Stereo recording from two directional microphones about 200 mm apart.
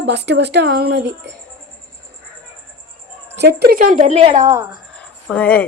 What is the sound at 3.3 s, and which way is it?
A woman's voice, 55° right (ahead or behind).